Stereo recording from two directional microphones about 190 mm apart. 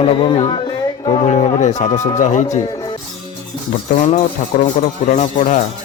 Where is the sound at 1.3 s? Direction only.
35° left (ahead or behind).